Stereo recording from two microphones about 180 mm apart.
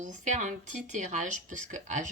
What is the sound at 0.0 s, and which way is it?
Speech, 45° right (ahead or behind).